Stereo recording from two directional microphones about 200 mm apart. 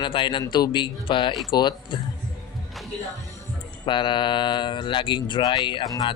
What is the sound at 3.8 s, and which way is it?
Speech, 25° left (ahead or behind).